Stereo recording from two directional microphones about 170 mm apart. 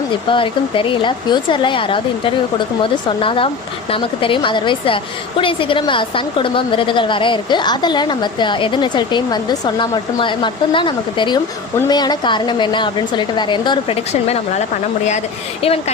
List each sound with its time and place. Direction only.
0.3 s a woman's voice: 30° left (ahead or behind)